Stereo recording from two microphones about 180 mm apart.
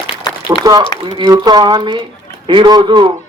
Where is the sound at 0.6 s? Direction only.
20° right (ahead or behind).